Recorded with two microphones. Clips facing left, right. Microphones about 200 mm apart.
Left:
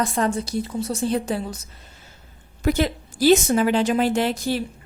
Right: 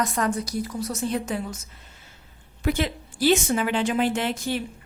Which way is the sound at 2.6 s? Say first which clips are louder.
Left 4 dB; 40° left (ahead or behind).